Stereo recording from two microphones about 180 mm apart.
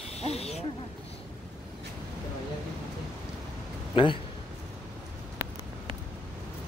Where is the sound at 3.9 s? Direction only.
25° left (ahead or behind).